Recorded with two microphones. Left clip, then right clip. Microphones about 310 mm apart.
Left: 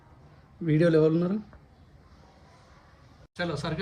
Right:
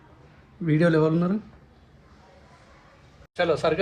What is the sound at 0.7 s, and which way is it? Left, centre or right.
Speech, centre.